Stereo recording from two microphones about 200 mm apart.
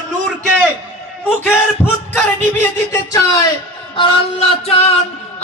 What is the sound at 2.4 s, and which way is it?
Speech, 15° left (ahead or behind).